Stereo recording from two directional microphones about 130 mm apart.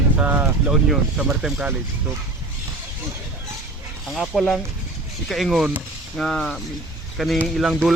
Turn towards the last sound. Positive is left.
turn(degrees=0)  # may be behind; listen again after turning